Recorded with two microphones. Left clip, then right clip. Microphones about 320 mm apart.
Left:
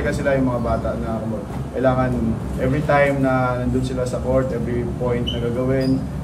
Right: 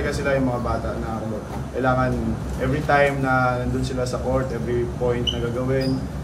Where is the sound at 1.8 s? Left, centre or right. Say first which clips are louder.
Left 2 dB; centre.